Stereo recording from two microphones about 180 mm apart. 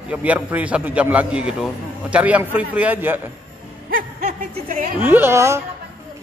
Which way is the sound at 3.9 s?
45° right (ahead or behind).